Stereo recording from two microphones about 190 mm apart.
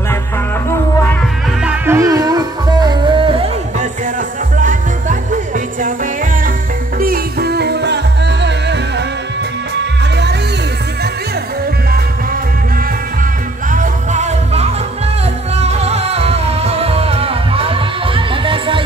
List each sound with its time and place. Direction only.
1.6 s music: 10° right (ahead or behind); by 3.5 s 30° right (ahead or behind)
4.6 s music: 40° right (ahead or behind)
7.0 s music: 50° right (ahead or behind)
13.7 s music: 40° right (ahead or behind)